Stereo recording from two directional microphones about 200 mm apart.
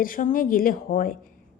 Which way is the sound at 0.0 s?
40° left (ahead or behind).